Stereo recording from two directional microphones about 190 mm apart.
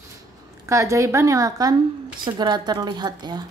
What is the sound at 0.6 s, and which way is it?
A woman's voice, 15° right (ahead or behind).